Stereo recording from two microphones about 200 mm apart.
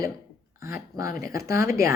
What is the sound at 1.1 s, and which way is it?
Speech, 50° left (ahead or behind).